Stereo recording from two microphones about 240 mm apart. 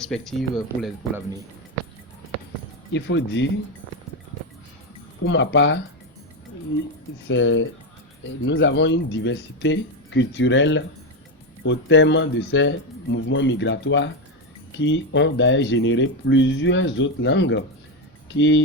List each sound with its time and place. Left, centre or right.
0.0 s speech: centre
2.9 s speech: left
5.2 s speech: left
7.3 s speech: left